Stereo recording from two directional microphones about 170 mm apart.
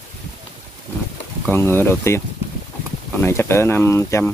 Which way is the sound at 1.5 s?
15° left (ahead or behind).